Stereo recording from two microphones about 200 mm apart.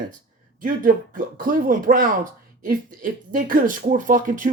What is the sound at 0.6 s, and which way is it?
Speech, 40° right (ahead or behind).